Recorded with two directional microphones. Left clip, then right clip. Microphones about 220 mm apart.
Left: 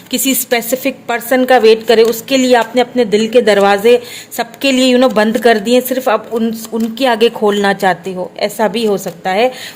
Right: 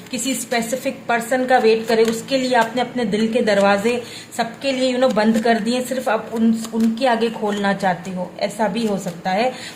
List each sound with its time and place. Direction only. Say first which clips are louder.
0.1 s a woman's voice: left 8 dB; 45° left (ahead or behind)